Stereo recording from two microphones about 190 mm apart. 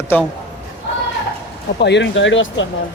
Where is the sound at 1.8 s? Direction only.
65° left (ahead or behind).